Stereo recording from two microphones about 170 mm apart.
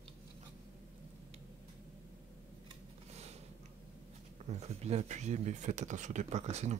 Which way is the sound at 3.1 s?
40° right (ahead or behind).